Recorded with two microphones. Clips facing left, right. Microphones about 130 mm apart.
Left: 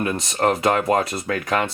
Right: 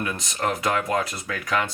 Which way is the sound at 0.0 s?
45° left (ahead or behind).